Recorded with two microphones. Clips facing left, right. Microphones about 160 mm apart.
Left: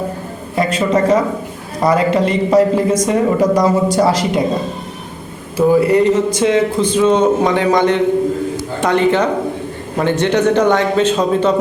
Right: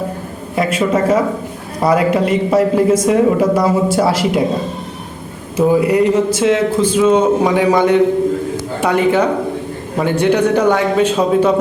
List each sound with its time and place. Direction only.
0.5 s speech: 5° right (ahead or behind)
5.5 s speech: 10° right (ahead or behind)